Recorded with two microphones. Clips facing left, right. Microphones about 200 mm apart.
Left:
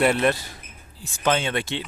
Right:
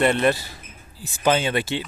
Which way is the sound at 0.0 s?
5° left (ahead or behind).